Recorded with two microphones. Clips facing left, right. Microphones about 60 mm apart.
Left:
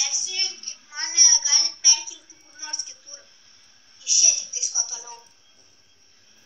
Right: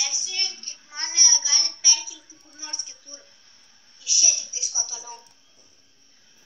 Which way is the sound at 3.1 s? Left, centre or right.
Right.